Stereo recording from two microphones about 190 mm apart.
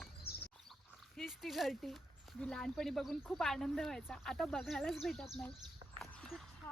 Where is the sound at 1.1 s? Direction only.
Centre (ahead or behind).